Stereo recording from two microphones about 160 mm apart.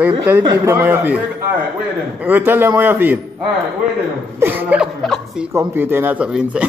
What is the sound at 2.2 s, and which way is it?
Speech, 10° right (ahead or behind).